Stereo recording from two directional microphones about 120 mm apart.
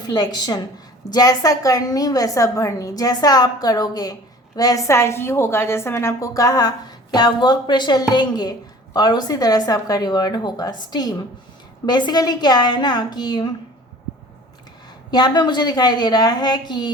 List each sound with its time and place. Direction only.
0.0 s a woman's voice: 35° left (ahead or behind)
15.1 s a woman's voice: 35° left (ahead or behind)